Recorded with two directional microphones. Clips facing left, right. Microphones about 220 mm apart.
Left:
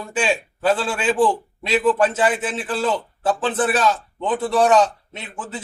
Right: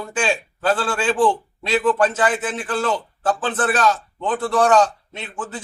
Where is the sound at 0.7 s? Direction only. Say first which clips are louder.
Right 2 dB; 20° left (ahead or behind).